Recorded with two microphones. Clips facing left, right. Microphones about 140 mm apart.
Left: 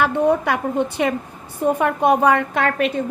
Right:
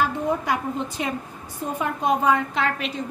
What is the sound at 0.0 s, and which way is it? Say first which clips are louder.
A woman's voice: left 6 dB; 65° left (ahead or behind).